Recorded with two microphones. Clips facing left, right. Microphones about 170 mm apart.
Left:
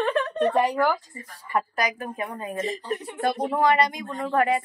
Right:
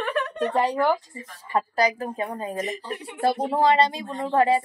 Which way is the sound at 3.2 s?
30° right (ahead or behind).